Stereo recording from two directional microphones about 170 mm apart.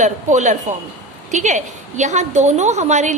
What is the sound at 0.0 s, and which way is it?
A woman's voice, 45° right (ahead or behind).